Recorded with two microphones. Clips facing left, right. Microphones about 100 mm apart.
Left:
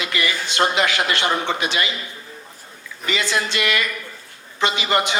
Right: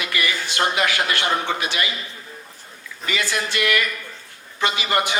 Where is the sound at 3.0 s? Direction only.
20° left (ahead or behind).